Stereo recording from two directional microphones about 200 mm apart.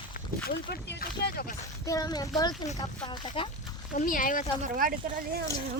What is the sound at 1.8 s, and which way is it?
Speech, 20° left (ahead or behind).